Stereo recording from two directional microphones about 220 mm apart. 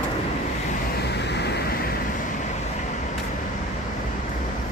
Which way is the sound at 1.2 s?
50° left (ahead or behind).